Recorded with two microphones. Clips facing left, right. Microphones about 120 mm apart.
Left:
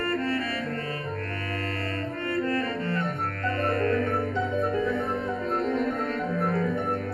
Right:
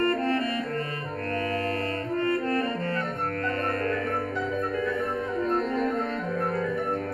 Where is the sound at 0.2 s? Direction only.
45° right (ahead or behind).